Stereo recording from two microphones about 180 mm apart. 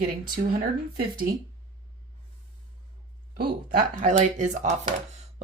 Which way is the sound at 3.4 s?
45° right (ahead or behind).